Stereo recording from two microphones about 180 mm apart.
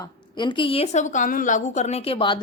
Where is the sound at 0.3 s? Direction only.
25° left (ahead or behind).